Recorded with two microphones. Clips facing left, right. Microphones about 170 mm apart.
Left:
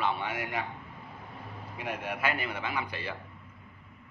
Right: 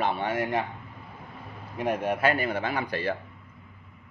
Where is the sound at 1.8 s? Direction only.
45° right (ahead or behind).